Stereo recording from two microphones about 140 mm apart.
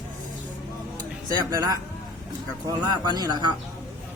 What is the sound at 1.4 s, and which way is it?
Speech, 25° right (ahead or behind).